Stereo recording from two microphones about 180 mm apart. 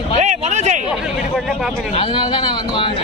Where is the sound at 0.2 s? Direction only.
40° right (ahead or behind).